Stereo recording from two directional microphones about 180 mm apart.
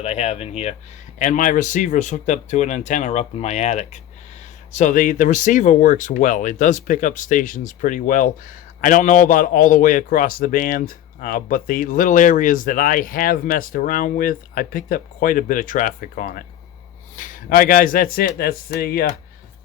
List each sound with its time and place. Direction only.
0.0 s speech: 35° left (ahead or behind); by 19.1 s 55° left (ahead or behind)